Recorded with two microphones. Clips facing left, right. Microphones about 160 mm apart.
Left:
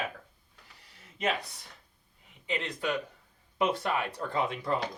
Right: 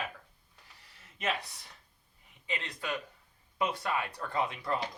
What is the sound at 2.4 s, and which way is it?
Speech, 20° left (ahead or behind).